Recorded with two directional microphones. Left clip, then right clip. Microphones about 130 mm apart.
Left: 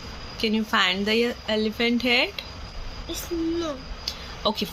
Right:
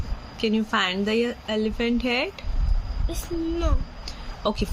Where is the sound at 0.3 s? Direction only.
15° right (ahead or behind).